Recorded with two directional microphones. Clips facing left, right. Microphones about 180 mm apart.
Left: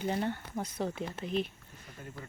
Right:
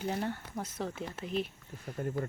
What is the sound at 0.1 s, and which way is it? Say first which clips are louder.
Speech: left 2 dB; centre (ahead or behind).